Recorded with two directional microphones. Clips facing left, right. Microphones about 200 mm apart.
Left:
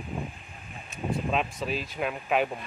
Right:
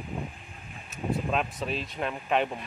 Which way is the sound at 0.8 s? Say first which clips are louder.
Even; centre (ahead or behind).